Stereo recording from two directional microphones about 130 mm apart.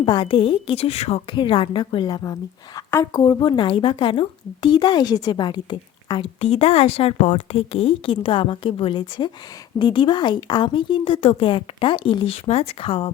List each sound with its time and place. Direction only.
0.0 s a woman's voice: 40° left (ahead or behind); by 1.2 s 55° left (ahead or behind)
1.3 s a woman's voice: 40° left (ahead or behind)
6.4 s a woman's voice: 50° left (ahead or behind)